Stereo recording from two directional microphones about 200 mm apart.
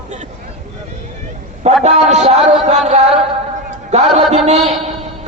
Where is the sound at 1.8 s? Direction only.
35° right (ahead or behind).